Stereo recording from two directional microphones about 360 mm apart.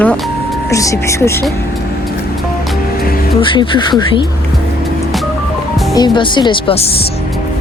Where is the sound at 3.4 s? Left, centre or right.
Centre.